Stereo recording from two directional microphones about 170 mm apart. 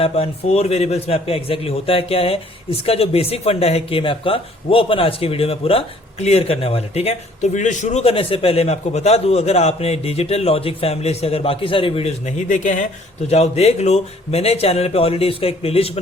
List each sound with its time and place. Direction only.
0.0 s a man's voice: 35° left (ahead or behind)